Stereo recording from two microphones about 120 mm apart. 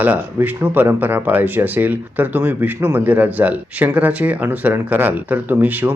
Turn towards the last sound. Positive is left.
turn(degrees=-15)  # may be behind; listen again after turning